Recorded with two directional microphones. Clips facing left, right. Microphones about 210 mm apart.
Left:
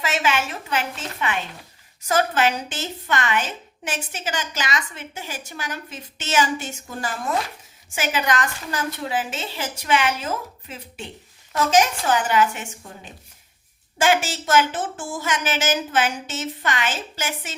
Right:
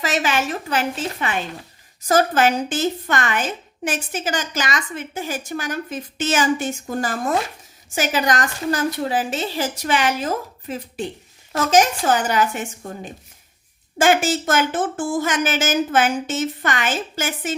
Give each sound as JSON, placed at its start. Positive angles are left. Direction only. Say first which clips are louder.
{"t": 0.0, "sound": "a woman's voice", "louder": "right 2 dB", "side_deg": -40}